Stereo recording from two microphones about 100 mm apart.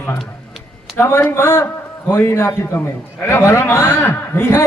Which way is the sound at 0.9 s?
25° left (ahead or behind).